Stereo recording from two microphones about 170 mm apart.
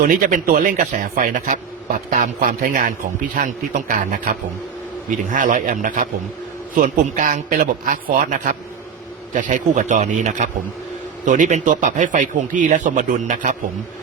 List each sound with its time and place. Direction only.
0.0 s a man's voice: 55° right (ahead or behind)